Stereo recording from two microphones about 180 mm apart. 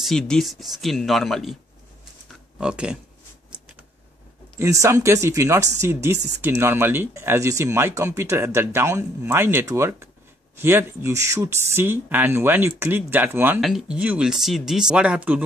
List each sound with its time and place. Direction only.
0.0 s speech: centre (ahead or behind)
2.6 s speech: 5° right (ahead or behind)
4.6 s speech: 15° right (ahead or behind)
13.6 s speech: centre (ahead or behind)